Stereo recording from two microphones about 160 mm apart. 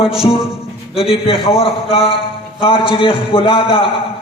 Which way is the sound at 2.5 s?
35° left (ahead or behind).